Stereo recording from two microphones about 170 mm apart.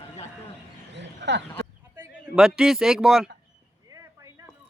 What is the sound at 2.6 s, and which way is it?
Speech, 5° right (ahead or behind).